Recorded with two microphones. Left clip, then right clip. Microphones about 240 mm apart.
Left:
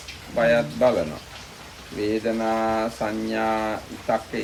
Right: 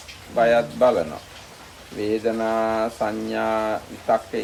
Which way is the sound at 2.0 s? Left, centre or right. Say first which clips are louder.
Right 1 dB; centre.